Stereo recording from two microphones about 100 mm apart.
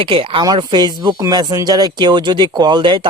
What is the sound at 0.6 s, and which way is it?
Speech, 50° right (ahead or behind).